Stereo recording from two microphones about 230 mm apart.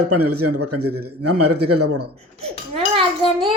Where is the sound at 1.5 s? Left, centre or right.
Right.